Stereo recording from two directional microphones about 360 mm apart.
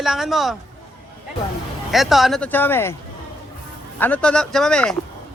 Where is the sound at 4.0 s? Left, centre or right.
Centre.